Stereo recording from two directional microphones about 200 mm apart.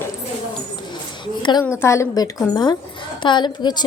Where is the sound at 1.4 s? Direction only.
20° left (ahead or behind).